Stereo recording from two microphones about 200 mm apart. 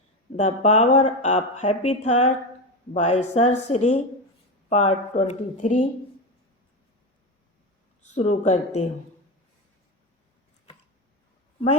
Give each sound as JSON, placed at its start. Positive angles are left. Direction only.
{"t": 0.3, "sound": "speech", "side_deg": 35}
{"t": 8.1, "sound": "speech", "side_deg": 35}